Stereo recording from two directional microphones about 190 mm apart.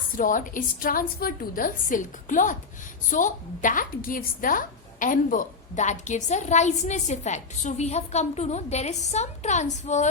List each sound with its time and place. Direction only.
0.2 s a woman's voice: 45° left (ahead or behind)